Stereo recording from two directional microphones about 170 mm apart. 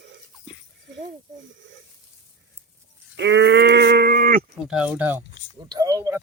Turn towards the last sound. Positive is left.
turn(degrees=-20)  # may be behind; listen again after turning